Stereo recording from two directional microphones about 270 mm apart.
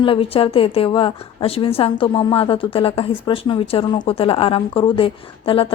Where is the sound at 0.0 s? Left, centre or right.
Centre.